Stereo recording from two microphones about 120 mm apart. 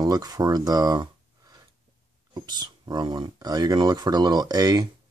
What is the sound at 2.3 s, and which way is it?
Speech, 35° right (ahead or behind).